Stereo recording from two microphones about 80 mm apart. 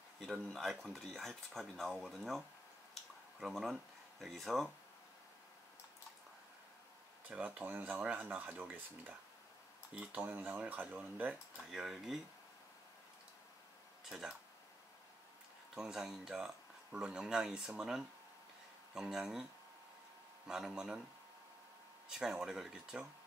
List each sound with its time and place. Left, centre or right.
0.2 s speech: centre
1.9 s speech: centre
7.2 s speech: centre
11.5 s speech: centre
14.0 s speech: centre
15.7 s speech: centre
20.4 s speech: centre
22.2 s speech: centre